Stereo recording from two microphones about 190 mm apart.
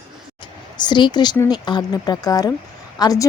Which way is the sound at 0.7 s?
25° left (ahead or behind).